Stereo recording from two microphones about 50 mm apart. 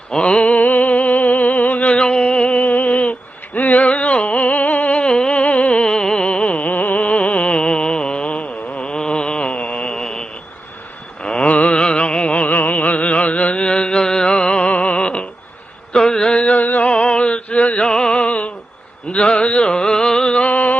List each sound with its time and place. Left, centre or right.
0.1 s a sound: centre
11.2 s music: centre
15.9 s mantra: centre
16.6 s music: left
16.9 s music: left
19.1 s a sound: left